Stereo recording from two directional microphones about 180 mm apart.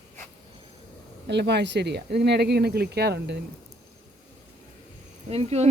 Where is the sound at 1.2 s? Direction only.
65° right (ahead or behind).